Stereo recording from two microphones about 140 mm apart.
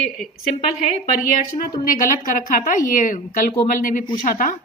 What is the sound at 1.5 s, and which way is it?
Speech, 30° left (ahead or behind).